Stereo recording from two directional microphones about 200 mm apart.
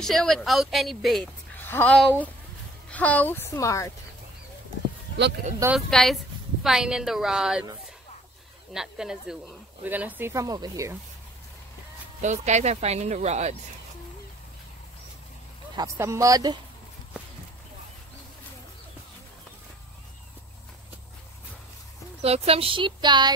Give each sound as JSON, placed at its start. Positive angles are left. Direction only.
{"t": 0.0, "sound": "a woman's voice", "side_deg": 0}
{"t": 5.8, "sound": "a woman's voice", "side_deg": 0}
{"t": 8.7, "sound": "speech", "side_deg": -5}
{"t": 12.2, "sound": "speech", "side_deg": -35}
{"t": 15.7, "sound": "speech", "side_deg": -20}
{"t": 22.2, "sound": "speech", "side_deg": -30}